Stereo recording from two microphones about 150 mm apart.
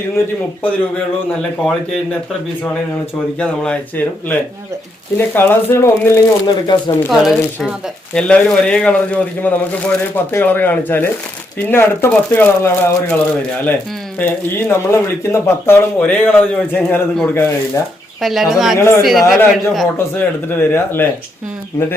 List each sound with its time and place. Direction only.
0.6 s speech: 5° left (ahead or behind)
3.3 s speech: 5° left (ahead or behind)
6.5 s speech: 30° left (ahead or behind)
7.1 s speech: centre (ahead or behind); by 17.5 s 15° left (ahead or behind)
18.2 s speech: centre (ahead or behind)
18.8 s speech: 20° left (ahead or behind)